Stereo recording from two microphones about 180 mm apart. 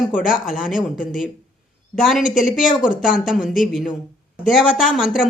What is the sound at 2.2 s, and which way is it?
Speech, 45° left (ahead or behind).